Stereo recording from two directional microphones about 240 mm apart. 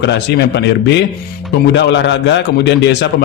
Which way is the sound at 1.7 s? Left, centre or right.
Left.